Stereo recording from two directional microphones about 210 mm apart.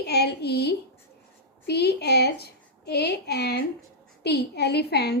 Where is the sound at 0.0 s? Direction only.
50° left (ahead or behind).